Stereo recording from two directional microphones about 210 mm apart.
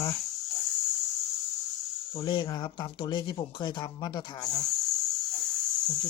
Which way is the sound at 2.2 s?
20° left (ahead or behind).